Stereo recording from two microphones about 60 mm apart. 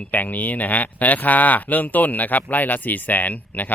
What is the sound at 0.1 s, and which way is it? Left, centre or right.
Speech, left.